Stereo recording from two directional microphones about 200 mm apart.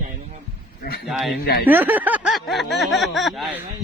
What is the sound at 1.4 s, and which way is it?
Speech, 50° left (ahead or behind).